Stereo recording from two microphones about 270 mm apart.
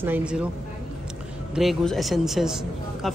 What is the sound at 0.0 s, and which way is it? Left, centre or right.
Speech, centre.